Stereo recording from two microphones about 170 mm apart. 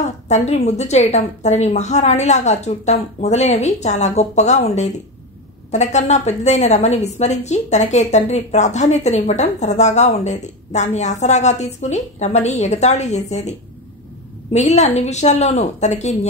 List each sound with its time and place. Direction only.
0.3 s a woman's voice: 40° left (ahead or behind)